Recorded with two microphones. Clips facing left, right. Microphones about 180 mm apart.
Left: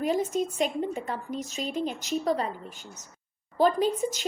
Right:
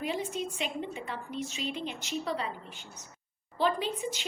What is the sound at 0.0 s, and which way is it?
A woman's voice, 45° left (ahead or behind).